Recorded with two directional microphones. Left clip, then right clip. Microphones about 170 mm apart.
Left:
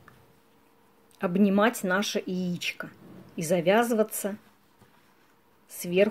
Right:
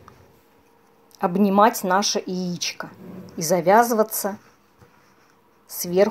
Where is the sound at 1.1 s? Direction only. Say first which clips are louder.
Right 7 dB; 20° left (ahead or behind).